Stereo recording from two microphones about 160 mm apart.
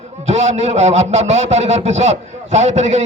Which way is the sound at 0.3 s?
45° right (ahead or behind).